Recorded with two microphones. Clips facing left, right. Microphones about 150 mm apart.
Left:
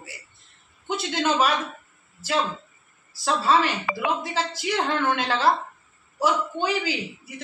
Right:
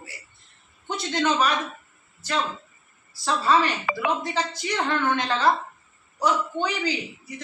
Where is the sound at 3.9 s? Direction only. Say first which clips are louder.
Right 1 dB; 80° right.